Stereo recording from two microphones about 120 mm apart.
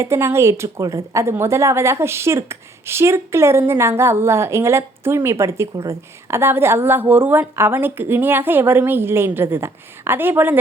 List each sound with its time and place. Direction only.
0.0 s a woman's voice: 20° right (ahead or behind)